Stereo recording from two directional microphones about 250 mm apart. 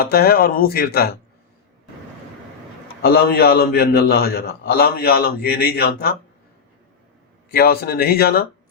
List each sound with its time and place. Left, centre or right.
0.0 s a man's voice: left
3.0 s a man's voice: left
7.5 s a man's voice: left